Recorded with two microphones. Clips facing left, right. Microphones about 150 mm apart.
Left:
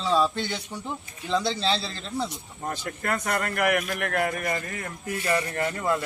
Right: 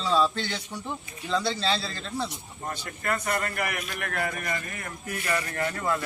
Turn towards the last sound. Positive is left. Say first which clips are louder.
# left 2 dB
turn(degrees=20)  # may be behind; listen again after turning